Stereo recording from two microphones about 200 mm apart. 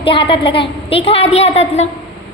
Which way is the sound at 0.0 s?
25° left (ahead or behind).